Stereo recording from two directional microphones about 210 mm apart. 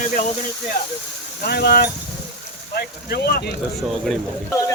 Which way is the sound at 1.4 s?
50° left (ahead or behind).